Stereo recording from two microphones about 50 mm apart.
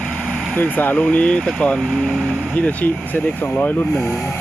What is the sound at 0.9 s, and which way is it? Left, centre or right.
Speech, left.